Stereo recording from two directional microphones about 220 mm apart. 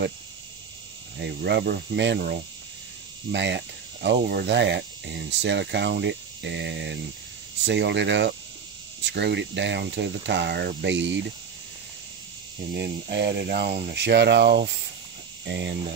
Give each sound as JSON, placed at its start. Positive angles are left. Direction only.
{"t": 1.1, "sound": "speech", "side_deg": -50}
{"t": 12.7, "sound": "speech", "side_deg": -50}